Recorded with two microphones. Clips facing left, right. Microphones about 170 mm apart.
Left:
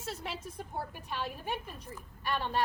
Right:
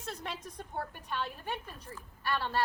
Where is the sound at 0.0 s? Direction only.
5° left (ahead or behind).